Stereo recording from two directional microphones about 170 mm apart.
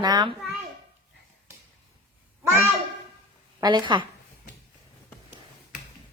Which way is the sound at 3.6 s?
25° right (ahead or behind).